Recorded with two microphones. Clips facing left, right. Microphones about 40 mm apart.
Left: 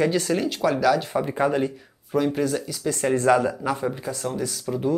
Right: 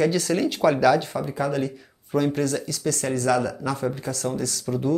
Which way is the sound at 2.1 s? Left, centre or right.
Centre.